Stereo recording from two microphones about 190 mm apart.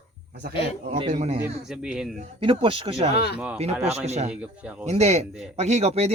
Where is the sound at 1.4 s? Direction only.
5° right (ahead or behind).